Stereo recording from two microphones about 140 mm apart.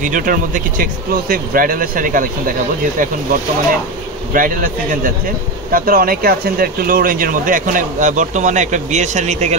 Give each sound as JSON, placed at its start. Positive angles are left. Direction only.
{"t": 0.0, "sound": "speech", "side_deg": -70}
{"t": 1.3, "sound": "speech", "side_deg": -90}
{"t": 4.3, "sound": "speech", "side_deg": -80}
{"t": 5.7, "sound": "speech", "side_deg": -90}